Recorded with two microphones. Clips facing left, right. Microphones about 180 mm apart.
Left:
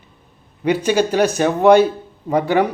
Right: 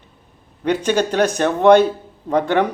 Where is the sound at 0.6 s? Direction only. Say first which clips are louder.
Left 1 dB; 10° left (ahead or behind).